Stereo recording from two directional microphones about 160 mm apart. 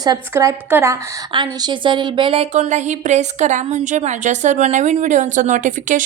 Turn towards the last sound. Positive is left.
turn(degrees=-50)  # may be behind; listen again after turning